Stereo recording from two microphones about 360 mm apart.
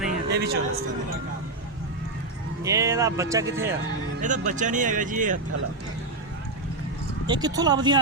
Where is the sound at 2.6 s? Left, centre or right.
Centre.